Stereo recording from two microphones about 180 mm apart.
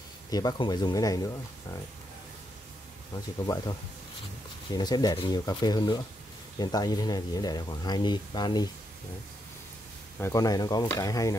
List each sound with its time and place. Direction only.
0.3 s speech: 20° left (ahead or behind)
3.4 s speech: 20° left (ahead or behind)
4.7 s speech: 20° left (ahead or behind)
10.2 s speech: 20° left (ahead or behind)